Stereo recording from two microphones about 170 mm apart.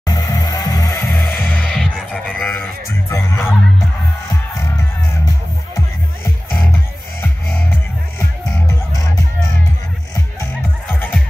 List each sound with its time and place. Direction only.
0.0 s music: 20° left (ahead or behind)
1.1 s music: centre (ahead or behind)
3.1 s speech: 15° left (ahead or behind)
10.9 s music: 10° left (ahead or behind)